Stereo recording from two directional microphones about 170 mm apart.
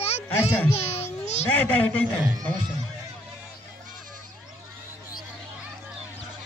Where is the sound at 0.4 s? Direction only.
15° left (ahead or behind).